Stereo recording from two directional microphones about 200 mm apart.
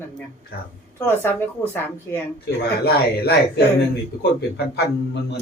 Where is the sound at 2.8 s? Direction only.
55° left (ahead or behind).